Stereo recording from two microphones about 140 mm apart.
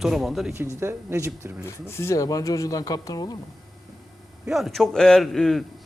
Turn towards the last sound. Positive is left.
turn(degrees=5)  # may be behind; listen again after turning